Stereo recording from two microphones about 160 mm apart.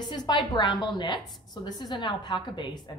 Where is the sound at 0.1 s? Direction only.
25° left (ahead or behind).